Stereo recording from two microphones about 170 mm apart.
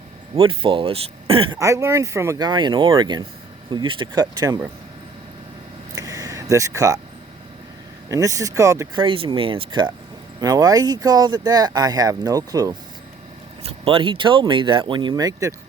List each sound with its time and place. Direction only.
0.3 s speech: 30° right (ahead or behind)
1.5 s speech: 20° right (ahead or behind)
5.9 s a sound: 20° right (ahead or behind)
8.1 s speech: 20° right (ahead or behind)
9.0 s speech: 30° right (ahead or behind)
13.7 s speech: 35° right (ahead or behind)